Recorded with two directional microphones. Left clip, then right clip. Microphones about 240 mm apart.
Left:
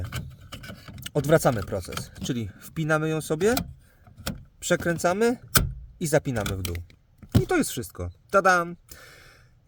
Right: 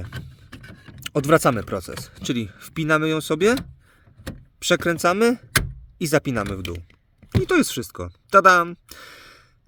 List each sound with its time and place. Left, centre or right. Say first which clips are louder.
1.1 s speech: right 4 dB; right
4.6 s speech: right 5 dB; right